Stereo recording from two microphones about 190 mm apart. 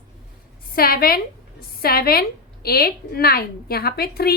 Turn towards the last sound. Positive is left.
turn(degrees=55)  # may be behind; listen again after turning